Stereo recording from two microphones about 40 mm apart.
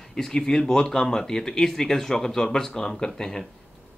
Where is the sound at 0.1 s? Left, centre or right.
Centre.